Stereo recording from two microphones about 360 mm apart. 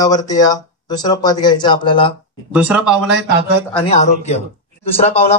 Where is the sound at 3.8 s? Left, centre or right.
Centre.